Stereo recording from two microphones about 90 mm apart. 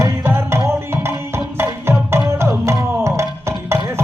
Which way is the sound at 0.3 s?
30° right (ahead or behind).